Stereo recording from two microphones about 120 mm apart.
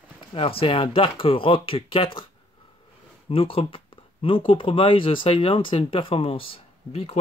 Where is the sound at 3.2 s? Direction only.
50° left (ahead or behind).